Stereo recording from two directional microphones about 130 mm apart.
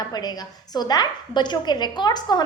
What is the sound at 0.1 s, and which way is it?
A woman's voice, 30° left (ahead or behind).